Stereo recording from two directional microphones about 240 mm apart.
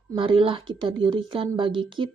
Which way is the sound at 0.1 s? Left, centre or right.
Right.